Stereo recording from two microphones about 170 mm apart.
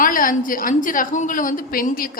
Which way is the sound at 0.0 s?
55° left (ahead or behind).